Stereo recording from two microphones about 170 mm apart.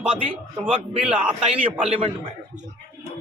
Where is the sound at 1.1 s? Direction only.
5° right (ahead or behind).